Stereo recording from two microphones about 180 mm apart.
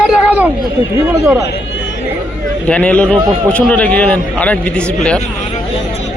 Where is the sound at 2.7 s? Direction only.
10° left (ahead or behind).